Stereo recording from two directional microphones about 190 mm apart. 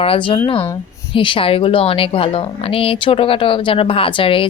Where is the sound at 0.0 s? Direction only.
30° left (ahead or behind).